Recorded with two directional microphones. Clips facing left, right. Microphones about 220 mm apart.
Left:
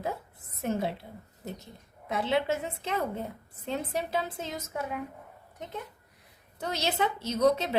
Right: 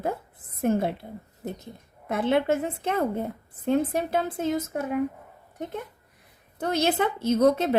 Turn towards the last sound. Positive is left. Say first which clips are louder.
# right 5 dB
turn(degrees=-50)  # may be behind; listen again after turning